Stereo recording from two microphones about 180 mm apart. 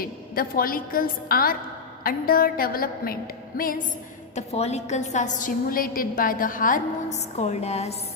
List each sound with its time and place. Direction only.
0.0 s a woman's voice: 55° left (ahead or behind)
4.4 s a woman's voice: 35° left (ahead or behind)